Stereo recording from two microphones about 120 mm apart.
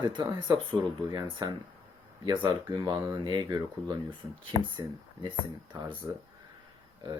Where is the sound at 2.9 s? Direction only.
35° right (ahead or behind).